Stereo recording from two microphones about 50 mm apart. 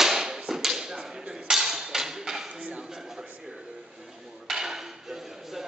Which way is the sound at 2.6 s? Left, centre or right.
Right.